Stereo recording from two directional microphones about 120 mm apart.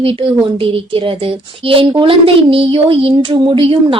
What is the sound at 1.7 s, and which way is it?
A woman's voice, 50° right (ahead or behind).